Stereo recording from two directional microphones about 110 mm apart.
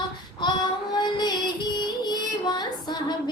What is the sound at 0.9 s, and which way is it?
Music, 40° left (ahead or behind).